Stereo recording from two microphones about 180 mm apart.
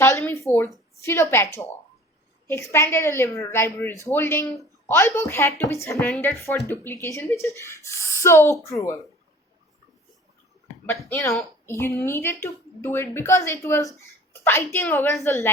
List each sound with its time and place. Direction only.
0.0 s a sound: 15° left (ahead or behind)
1.0 s a woman's voice: 15° left (ahead or behind)
2.5 s a woman's voice: 15° left (ahead or behind)
11.6 s a woman's voice: 15° left (ahead or behind)